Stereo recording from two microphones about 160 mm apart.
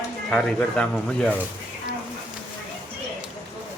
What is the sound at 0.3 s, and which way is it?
Speech, 5° left (ahead or behind).